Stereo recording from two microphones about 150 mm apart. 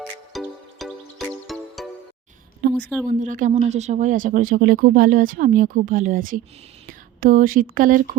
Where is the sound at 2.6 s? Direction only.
90° right.